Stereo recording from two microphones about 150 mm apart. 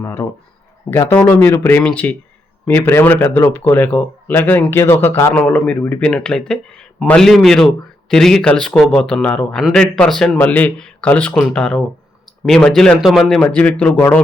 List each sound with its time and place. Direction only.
0.0 s speech: 20° left (ahead or behind)